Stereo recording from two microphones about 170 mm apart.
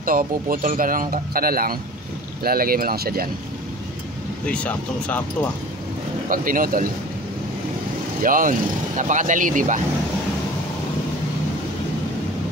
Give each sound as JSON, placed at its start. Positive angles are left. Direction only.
{"t": 0.0, "sound": "a man's voice", "side_deg": -55}
{"t": 4.5, "sound": "speech", "side_deg": 5}
{"t": 6.2, "sound": "speech", "side_deg": -55}
{"t": 8.2, "sound": "speech", "side_deg": -50}